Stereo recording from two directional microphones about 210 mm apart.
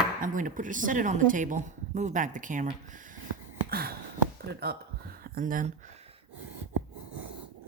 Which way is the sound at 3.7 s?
45° right (ahead or behind).